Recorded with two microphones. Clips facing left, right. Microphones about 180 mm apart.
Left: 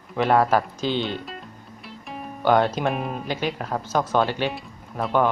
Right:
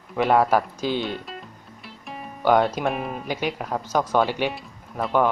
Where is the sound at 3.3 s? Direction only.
10° right (ahead or behind).